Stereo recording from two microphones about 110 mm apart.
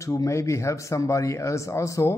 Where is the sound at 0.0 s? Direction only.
30° left (ahead or behind).